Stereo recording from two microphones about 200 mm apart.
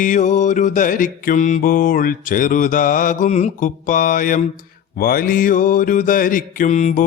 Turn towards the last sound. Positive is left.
turn(degrees=35)  # may be behind; listen again after turning